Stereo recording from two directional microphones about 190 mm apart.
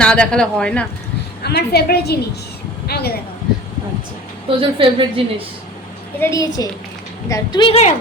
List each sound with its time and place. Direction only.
0.0 s speech: 5° left (ahead or behind)
1.5 s a woman's voice: 55° left (ahead or behind)
4.4 s a woman's voice: 30° right (ahead or behind)
6.1 s a woman's voice: 15° left (ahead or behind); by 7.9 s 35° left (ahead or behind)